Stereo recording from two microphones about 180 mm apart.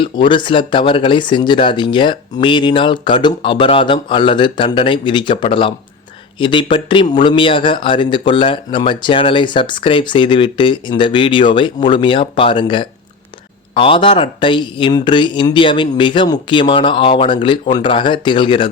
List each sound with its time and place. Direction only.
0.0 s speech: 25° left (ahead or behind)